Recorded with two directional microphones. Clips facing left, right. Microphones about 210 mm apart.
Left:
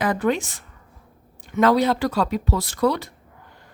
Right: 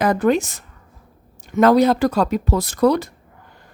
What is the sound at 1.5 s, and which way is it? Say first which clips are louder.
Speech: right 4 dB; 45° right (ahead or behind).